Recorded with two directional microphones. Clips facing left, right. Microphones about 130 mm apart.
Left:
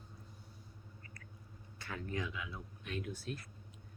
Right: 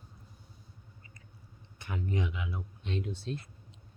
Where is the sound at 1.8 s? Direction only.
20° right (ahead or behind).